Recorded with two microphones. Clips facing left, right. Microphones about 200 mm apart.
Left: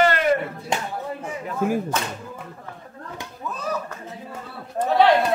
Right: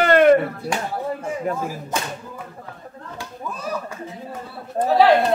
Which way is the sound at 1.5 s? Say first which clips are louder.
Right 6 dB; 50° right (ahead or behind).